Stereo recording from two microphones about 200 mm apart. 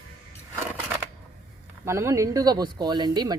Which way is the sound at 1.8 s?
15° right (ahead or behind).